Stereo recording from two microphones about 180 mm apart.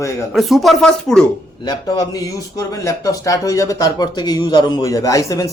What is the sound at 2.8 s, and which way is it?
Speech, 20° left (ahead or behind).